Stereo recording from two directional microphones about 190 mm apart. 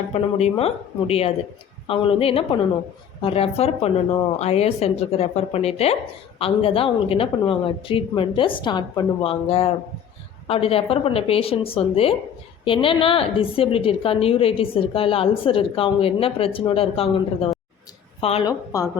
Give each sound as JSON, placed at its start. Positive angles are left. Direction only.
{"t": 0.1, "sound": "a woman's voice", "side_deg": 35}